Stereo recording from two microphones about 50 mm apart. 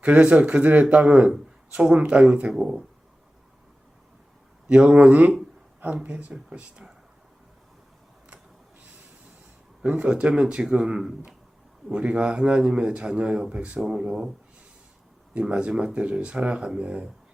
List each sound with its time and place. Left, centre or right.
0.0 s a man's voice: right
4.7 s a man's voice: right
6.5 s a man's voice: centre
9.8 s a man's voice: right
15.4 s a man's voice: right